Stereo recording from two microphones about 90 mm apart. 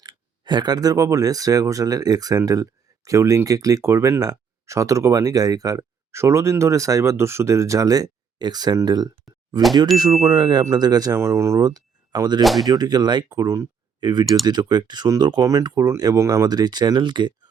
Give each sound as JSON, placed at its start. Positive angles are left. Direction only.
{"t": 0.0, "sound": "speech", "side_deg": -50}
{"t": 10.6, "sound": "speech", "side_deg": -45}
{"t": 11.2, "sound": "speech", "side_deg": -30}
{"t": 11.6, "sound": "a sound", "side_deg": -45}
{"t": 12.4, "sound": "speech", "side_deg": 0}
{"t": 12.6, "sound": "speech", "side_deg": -50}
{"t": 13.4, "sound": "speech", "side_deg": -35}
{"t": 14.0, "sound": "speech", "side_deg": -55}
{"t": 15.4, "sound": "speech", "side_deg": -40}